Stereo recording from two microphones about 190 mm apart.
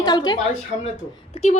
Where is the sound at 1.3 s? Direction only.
35° left (ahead or behind).